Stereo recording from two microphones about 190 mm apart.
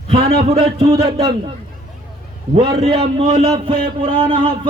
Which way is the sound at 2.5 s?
30° right (ahead or behind).